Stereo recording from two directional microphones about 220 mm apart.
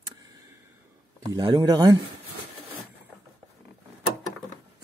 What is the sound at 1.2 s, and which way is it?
Speech, 20° right (ahead or behind).